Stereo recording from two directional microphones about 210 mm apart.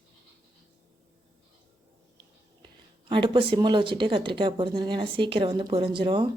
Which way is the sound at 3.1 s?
25° right (ahead or behind).